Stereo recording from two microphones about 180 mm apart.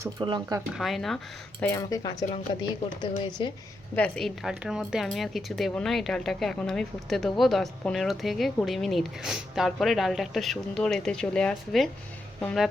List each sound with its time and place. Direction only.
0.0 s speech: 25° right (ahead or behind)
0.8 s speech: centre (ahead or behind)
1.6 s speech: 15° left (ahead or behind)
3.9 s speech: 5° left (ahead or behind)